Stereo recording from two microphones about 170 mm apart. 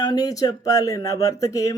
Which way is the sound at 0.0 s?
20° left (ahead or behind).